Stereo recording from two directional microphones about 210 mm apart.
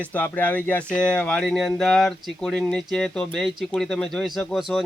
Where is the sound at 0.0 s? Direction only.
10° left (ahead or behind).